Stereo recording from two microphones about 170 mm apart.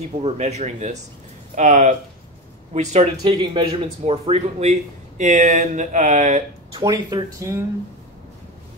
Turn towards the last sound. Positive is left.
turn(degrees=-15)  # may be behind; listen again after turning